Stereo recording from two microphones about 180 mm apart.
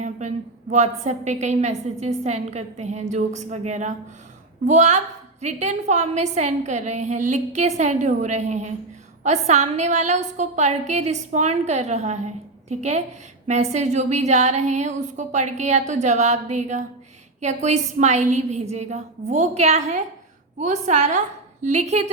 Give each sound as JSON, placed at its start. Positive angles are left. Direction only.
{"t": 0.0, "sound": "a woman's voice", "side_deg": -40}